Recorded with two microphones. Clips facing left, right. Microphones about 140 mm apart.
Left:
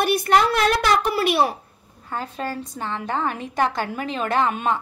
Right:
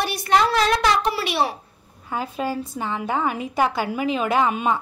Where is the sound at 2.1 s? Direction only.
10° right (ahead or behind).